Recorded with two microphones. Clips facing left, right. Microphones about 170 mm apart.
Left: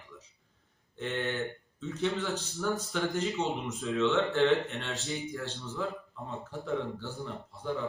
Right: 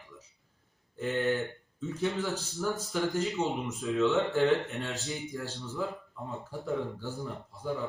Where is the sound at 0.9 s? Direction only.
Centre (ahead or behind).